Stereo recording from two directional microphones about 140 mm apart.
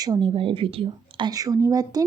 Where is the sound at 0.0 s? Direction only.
30° right (ahead or behind).